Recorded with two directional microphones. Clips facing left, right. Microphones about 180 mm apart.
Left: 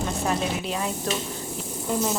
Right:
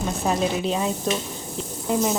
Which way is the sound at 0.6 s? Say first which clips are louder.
Right 5 dB; 25° right (ahead or behind).